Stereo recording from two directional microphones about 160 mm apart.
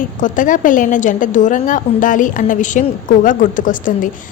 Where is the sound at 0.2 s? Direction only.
55° left (ahead or behind).